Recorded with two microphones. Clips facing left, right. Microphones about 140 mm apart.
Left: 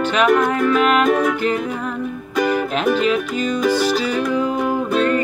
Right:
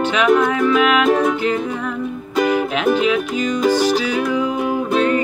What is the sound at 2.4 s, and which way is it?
Music, 10° right (ahead or behind).